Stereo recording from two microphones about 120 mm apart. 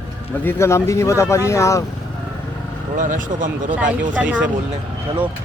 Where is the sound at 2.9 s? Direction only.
90° right.